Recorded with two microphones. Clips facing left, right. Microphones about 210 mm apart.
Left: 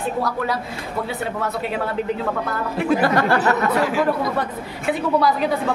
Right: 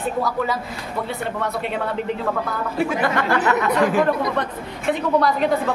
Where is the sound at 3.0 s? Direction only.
35° left (ahead or behind).